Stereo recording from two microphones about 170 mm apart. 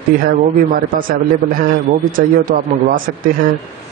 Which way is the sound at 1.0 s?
55° right (ahead or behind).